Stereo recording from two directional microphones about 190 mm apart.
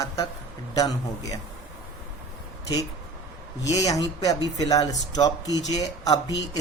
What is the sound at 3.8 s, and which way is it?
A woman's voice, 20° left (ahead or behind).